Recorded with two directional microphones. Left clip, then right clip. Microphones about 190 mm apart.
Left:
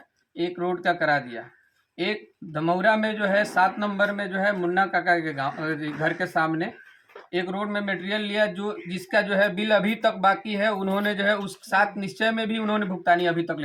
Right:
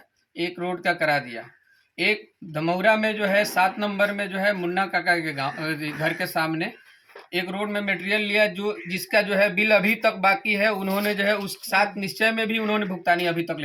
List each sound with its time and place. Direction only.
0.3 s speech: centre (ahead or behind)